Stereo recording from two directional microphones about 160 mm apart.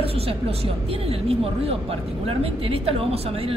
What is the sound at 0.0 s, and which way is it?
Speech, 35° right (ahead or behind).